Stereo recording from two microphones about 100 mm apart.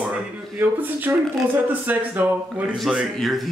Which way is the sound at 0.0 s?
15° right (ahead or behind).